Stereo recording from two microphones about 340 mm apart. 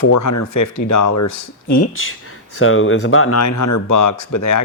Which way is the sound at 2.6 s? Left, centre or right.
Left.